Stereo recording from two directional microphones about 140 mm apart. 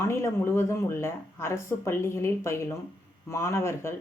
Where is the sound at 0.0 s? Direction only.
20° left (ahead or behind).